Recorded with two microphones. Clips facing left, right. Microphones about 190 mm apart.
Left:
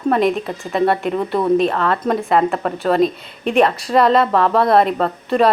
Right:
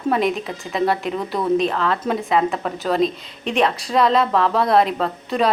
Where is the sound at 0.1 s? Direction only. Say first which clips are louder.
Left 3 dB; centre (ahead or behind).